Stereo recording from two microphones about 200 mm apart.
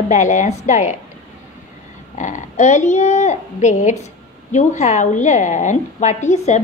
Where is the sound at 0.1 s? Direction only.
35° left (ahead or behind).